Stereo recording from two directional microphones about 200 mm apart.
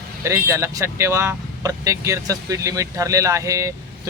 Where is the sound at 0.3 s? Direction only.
15° right (ahead or behind).